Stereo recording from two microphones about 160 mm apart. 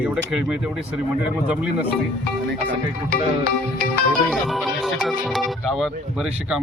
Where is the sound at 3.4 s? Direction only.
75° left (ahead or behind).